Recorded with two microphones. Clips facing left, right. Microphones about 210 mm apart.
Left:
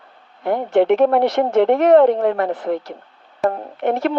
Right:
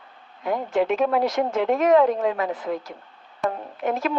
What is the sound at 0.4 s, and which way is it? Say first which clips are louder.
Speech: left 7 dB; 65° left (ahead or behind).